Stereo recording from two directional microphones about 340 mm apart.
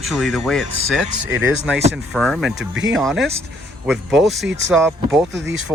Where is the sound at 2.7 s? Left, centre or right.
Right.